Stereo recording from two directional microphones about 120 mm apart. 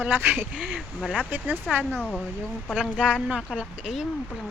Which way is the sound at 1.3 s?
15° right (ahead or behind).